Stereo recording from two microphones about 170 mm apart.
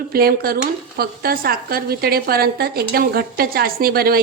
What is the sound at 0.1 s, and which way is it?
A woman's voice, 60° right (ahead or behind).